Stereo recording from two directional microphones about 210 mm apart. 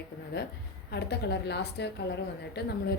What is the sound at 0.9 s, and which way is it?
A woman's voice, 55° left (ahead or behind).